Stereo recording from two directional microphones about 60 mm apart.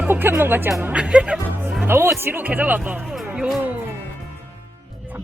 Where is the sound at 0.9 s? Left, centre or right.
Centre.